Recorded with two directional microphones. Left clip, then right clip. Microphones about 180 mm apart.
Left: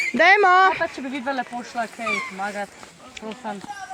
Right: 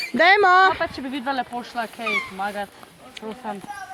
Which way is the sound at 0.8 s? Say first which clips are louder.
Even; 20° left (ahead or behind).